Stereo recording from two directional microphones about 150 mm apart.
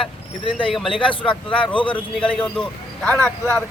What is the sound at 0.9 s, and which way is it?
Speech, 35° left (ahead or behind).